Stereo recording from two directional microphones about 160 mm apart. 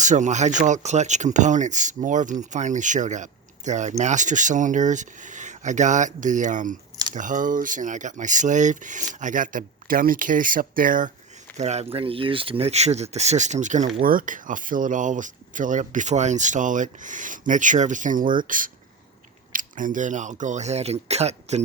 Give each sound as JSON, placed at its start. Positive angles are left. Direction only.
{"t": 0.0, "sound": "speech", "side_deg": -50}
{"t": 11.5, "sound": "speech", "side_deg": -45}